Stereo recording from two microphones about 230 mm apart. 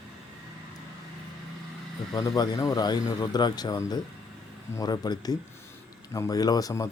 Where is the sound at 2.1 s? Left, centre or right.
Centre.